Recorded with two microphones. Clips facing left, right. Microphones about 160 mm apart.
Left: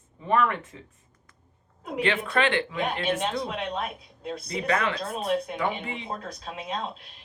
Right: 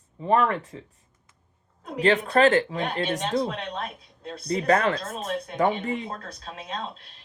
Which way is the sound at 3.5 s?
10° left (ahead or behind).